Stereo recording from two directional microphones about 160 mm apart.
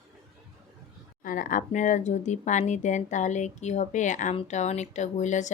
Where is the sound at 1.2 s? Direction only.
55° left (ahead or behind).